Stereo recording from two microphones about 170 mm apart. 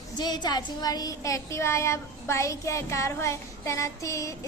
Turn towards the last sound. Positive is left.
turn(degrees=20)  # may be behind; listen again after turning